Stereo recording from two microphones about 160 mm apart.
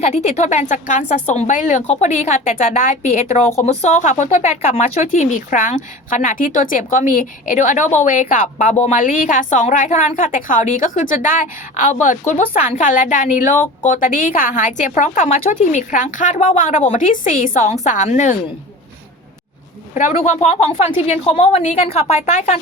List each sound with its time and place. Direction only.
0.0 s speech: 40° left (ahead or behind)
9.0 s a woman's voice: 55° left (ahead or behind)
19.9 s a woman's voice: 50° left (ahead or behind)